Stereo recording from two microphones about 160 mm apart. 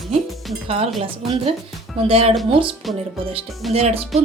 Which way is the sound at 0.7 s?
40° right (ahead or behind).